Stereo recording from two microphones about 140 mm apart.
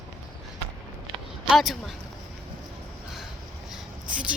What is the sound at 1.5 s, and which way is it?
Speech, centre (ahead or behind).